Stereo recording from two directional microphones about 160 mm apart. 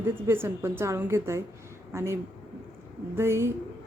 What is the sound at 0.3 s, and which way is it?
A woman's voice, 15° right (ahead or behind).